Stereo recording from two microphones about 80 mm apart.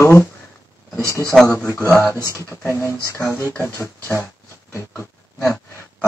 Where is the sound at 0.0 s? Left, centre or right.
Left.